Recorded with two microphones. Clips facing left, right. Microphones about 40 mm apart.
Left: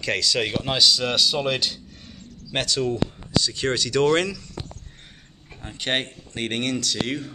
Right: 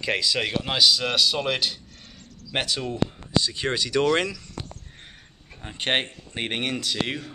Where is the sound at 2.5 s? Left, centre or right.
Centre.